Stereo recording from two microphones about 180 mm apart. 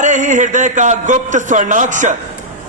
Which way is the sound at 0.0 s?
45° right (ahead or behind).